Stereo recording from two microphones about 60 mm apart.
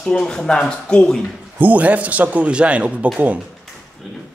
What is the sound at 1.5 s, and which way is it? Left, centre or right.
A man's voice, right.